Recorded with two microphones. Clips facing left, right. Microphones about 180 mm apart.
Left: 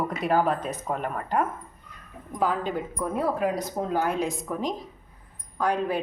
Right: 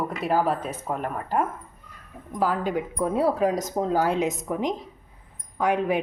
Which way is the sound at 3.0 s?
30° right (ahead or behind).